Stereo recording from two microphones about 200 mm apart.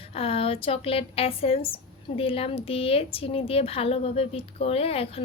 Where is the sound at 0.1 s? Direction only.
30° left (ahead or behind).